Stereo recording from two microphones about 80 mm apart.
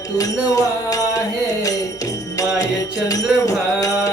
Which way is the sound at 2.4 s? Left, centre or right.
Left.